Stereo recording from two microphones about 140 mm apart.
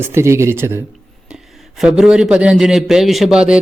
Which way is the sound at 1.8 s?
5° right (ahead or behind).